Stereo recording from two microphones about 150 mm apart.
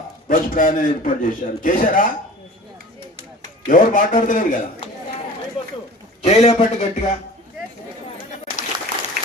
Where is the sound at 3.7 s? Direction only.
65° left (ahead or behind).